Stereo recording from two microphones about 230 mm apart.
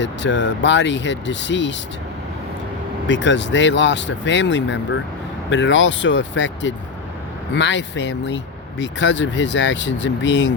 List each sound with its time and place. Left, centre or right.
0.0 s speech: left
3.1 s speech: left